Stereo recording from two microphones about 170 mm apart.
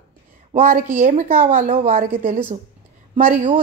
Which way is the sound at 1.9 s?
55° right (ahead or behind).